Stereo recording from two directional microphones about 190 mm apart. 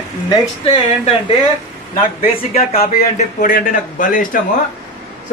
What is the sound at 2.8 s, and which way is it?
A man's voice, 40° left (ahead or behind).